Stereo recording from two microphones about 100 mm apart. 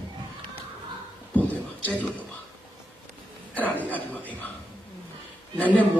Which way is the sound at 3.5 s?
15° left (ahead or behind).